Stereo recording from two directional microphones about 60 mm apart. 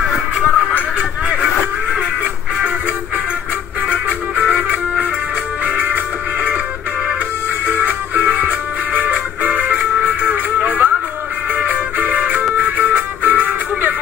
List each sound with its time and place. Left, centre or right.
0.0 s music: centre
3.9 s music: right
7.6 s music: right